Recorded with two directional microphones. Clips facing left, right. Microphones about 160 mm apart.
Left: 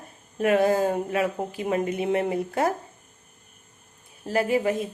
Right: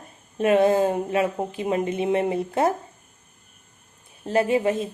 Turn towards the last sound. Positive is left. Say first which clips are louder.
# right 2 dB
turn(degrees=-25)  # may be behind; listen again after turning